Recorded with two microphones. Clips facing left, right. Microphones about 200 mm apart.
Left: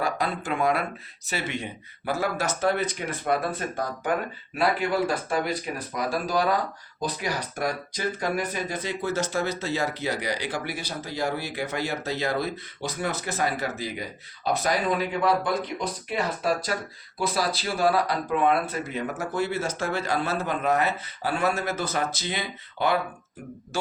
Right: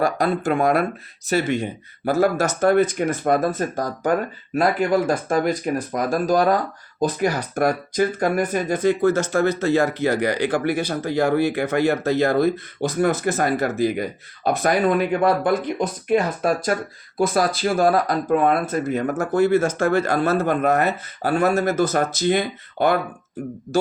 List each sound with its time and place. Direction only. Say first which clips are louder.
0.0 s speech: right 7 dB; 45° right (ahead or behind)